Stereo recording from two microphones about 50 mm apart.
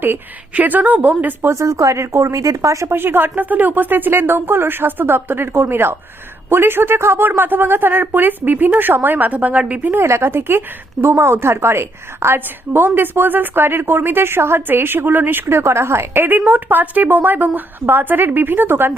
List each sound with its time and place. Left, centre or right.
0.5 s a woman's voice: right
1.5 s speech: right
2.9 s a woman's voice: right
9.9 s a woman's voice: right
15.4 s a woman's voice: right